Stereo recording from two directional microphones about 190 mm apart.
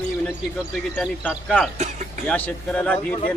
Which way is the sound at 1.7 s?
35° right (ahead or behind).